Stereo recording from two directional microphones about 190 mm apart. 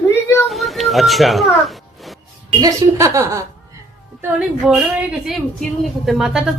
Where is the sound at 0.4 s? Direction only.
Centre (ahead or behind).